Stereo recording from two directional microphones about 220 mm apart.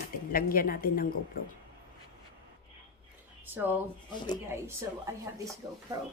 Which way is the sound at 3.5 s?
10° right (ahead or behind).